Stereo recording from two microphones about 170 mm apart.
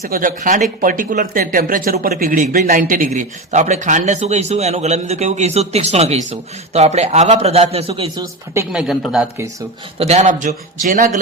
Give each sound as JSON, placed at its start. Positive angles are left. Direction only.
{"t": 0.0, "sound": "speech", "side_deg": -55}
{"t": 3.2, "sound": "a man's voice", "side_deg": -45}
{"t": 8.7, "sound": "speech", "side_deg": -5}
{"t": 10.0, "sound": "a man's voice", "side_deg": -40}